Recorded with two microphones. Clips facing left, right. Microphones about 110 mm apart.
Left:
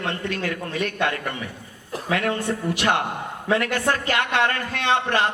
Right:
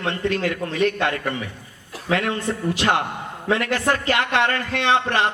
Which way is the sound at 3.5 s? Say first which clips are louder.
Right 1 dB; 25° right (ahead or behind).